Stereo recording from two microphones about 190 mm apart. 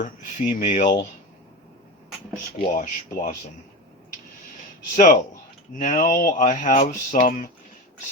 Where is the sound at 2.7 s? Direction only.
45° left (ahead or behind).